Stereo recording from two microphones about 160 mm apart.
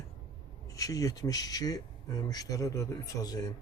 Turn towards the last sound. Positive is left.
turn(degrees=25)  # may be behind; listen again after turning